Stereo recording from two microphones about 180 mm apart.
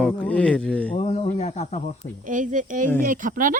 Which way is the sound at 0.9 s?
35° left (ahead or behind).